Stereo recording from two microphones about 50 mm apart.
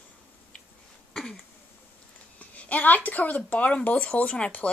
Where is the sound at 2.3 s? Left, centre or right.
Left.